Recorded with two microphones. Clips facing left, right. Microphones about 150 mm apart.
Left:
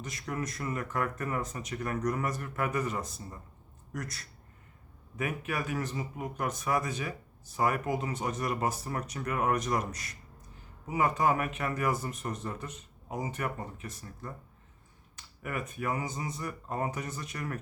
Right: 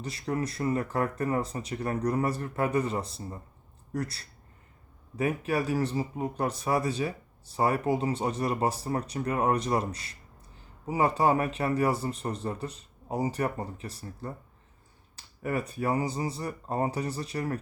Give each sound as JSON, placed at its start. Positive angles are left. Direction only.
{"t": 0.0, "sound": "speech", "side_deg": -30}